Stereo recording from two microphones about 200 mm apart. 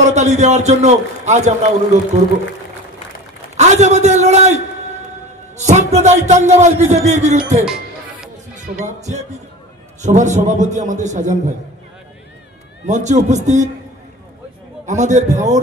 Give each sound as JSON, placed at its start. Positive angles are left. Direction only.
{"t": 0.0, "sound": "a man's voice", "side_deg": -35}
{"t": 3.5, "sound": "a man's voice", "side_deg": -35}
{"t": 5.6, "sound": "a man's voice", "side_deg": -35}
{"t": 7.6, "sound": "music", "side_deg": -5}
{"t": 8.8, "sound": "a man's voice", "side_deg": -35}
{"t": 12.8, "sound": "a man's voice", "side_deg": -35}
{"t": 14.9, "sound": "a man's voice", "side_deg": -35}